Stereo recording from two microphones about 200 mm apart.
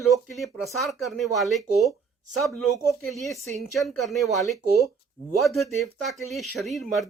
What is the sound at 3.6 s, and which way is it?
Speech, centre (ahead or behind).